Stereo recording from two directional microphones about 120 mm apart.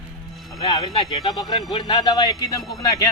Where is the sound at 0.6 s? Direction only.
30° left (ahead or behind).